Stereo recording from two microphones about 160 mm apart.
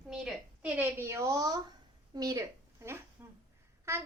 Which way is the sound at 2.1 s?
20° right (ahead or behind).